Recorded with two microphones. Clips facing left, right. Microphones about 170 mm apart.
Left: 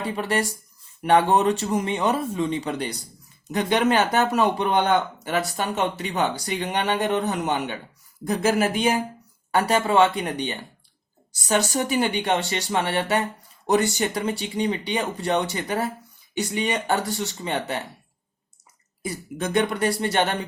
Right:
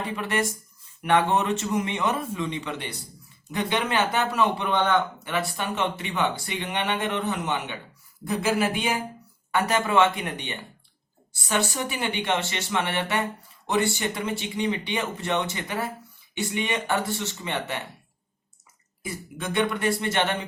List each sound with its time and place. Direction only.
0.0 s speech: 35° left (ahead or behind)
19.0 s speech: 40° left (ahead or behind)